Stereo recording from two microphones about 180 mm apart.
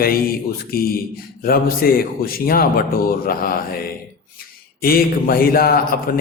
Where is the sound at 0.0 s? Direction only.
55° left (ahead or behind).